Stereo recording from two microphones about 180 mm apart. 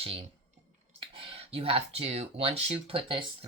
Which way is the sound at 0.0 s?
30° right (ahead or behind).